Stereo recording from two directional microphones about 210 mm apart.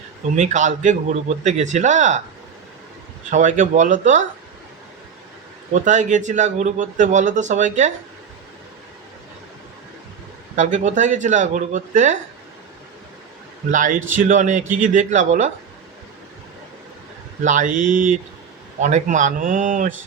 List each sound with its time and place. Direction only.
0.3 s speech: 35° right (ahead or behind)
3.2 s speech: 35° right (ahead or behind)
5.7 s speech: 35° right (ahead or behind)
10.5 s speech: 35° right (ahead or behind)
13.7 s speech: 40° right (ahead or behind)
17.4 s speech: 35° right (ahead or behind)